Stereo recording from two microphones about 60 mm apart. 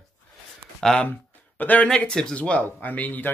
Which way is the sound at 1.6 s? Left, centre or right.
Left.